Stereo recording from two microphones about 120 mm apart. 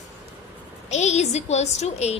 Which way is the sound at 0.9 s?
70° left (ahead or behind).